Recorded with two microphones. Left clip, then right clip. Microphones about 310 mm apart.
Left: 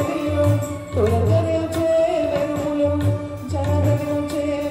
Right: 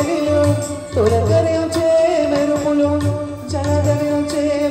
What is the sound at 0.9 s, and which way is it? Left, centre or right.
Music, right.